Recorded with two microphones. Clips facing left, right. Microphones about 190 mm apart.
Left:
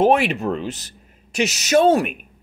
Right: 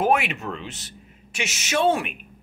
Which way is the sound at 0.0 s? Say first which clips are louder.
Left 6 dB; 30° left (ahead or behind).